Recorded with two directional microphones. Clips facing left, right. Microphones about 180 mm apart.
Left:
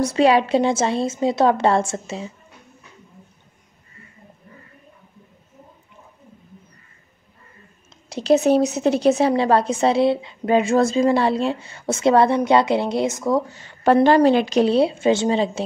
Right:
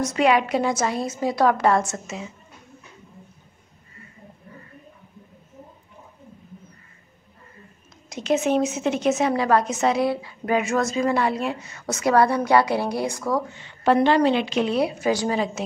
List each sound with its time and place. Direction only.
0.0 s a woman's voice: 30° left (ahead or behind)
8.1 s a woman's voice: 35° left (ahead or behind)
13.5 s a woman's voice: 40° left (ahead or behind)